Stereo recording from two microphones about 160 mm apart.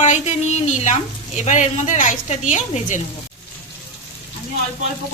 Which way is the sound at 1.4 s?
50° left (ahead or behind).